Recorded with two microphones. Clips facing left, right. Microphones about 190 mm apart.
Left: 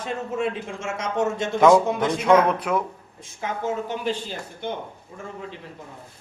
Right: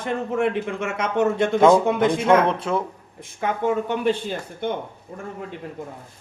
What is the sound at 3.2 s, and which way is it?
A man's voice, 60° right (ahead or behind).